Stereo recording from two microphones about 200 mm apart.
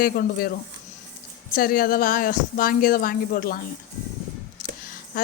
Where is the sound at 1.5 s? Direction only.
45° left (ahead or behind).